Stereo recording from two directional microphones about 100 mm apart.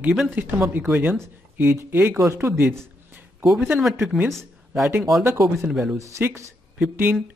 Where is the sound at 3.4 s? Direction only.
5° right (ahead or behind).